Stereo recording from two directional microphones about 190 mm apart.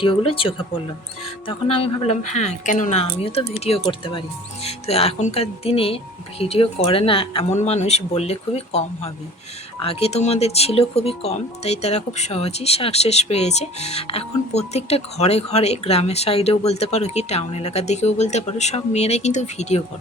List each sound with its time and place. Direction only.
0.0 s speech: 30° left (ahead or behind)